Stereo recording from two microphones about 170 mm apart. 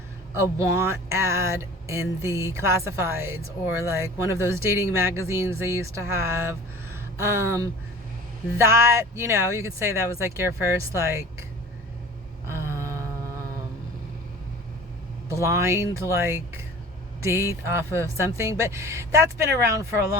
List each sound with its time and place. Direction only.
0.3 s speech: 15° right (ahead or behind)
12.5 s vehicle: 15° right (ahead or behind)
15.3 s speech: 15° right (ahead or behind)